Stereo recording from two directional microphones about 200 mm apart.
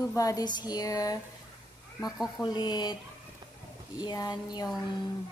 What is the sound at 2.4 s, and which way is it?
Speech, 20° left (ahead or behind).